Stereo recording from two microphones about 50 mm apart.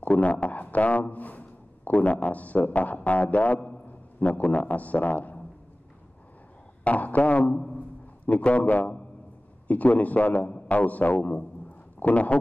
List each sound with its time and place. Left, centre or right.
0.0 s a man's voice: left
6.8 s a man's voice: left